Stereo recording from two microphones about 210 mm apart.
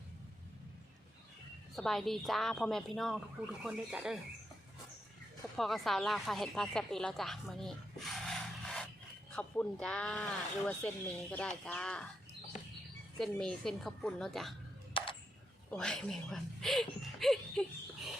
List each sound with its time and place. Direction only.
1.7 s speech: centre (ahead or behind)
5.5 s speech: centre (ahead or behind)
13.1 s speech: 5° left (ahead or behind)
15.0 s a sound: 25° left (ahead or behind)
15.7 s speech: 5° left (ahead or behind)